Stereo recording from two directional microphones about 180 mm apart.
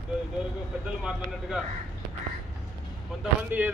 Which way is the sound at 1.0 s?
Centre (ahead or behind).